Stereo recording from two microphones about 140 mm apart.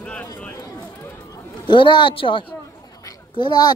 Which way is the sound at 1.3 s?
35° left (ahead or behind).